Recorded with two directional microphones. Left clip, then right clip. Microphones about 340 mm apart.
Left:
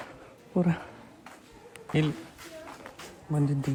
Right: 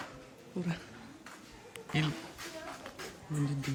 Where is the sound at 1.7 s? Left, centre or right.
Centre.